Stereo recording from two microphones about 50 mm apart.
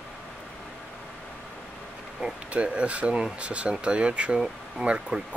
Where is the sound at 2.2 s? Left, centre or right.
Right.